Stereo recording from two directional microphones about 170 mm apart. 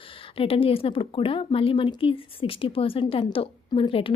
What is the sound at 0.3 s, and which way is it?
Speech, 35° left (ahead or behind).